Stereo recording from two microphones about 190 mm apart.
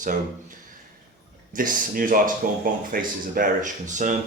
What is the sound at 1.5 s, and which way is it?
Speech, 45° right (ahead or behind).